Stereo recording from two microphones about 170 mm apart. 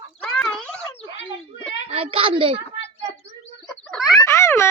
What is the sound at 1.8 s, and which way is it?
A woman's voice, 35° right (ahead or behind).